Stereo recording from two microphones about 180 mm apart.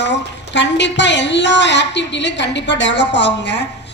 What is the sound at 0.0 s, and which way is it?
A woman's voice, 80° left.